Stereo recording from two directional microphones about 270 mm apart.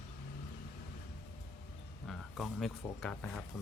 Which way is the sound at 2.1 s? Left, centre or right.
Centre.